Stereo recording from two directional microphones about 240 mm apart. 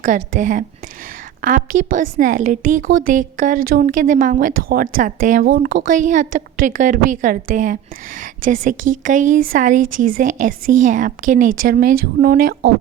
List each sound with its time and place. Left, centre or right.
0.0 s a woman's voice: right